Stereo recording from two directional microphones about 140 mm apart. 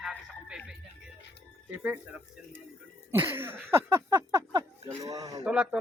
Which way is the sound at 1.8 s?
10° right (ahead or behind).